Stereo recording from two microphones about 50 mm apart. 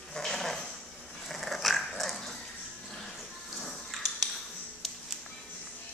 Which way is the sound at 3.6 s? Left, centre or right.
Centre.